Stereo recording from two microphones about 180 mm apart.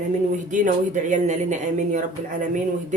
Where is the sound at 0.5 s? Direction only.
45° right (ahead or behind).